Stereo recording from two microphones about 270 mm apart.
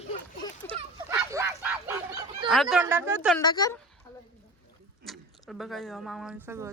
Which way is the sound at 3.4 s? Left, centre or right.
Centre.